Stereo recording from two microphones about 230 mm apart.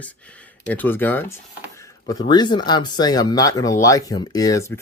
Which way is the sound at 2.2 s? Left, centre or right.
Centre.